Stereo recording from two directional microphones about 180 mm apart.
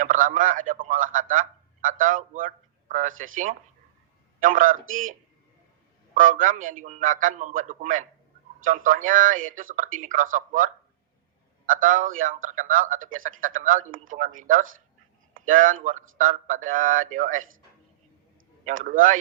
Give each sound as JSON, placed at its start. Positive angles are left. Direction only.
{"t": 0.0, "sound": "a man's voice", "side_deg": -45}
{"t": 4.4, "sound": "a man's voice", "side_deg": -45}
{"t": 6.1, "sound": "a man's voice", "side_deg": -50}
{"t": 18.6, "sound": "a man's voice", "side_deg": -50}